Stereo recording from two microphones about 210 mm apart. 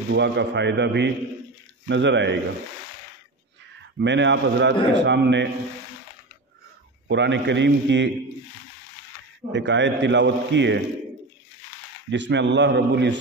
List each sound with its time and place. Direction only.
0.1 s a man's voice: 55° right (ahead or behind)
4.0 s a man's voice: 60° right (ahead or behind)
7.1 s a man's voice: 60° right (ahead or behind)
9.5 s a man's voice: 60° right (ahead or behind)
12.1 s a man's voice: 60° right (ahead or behind)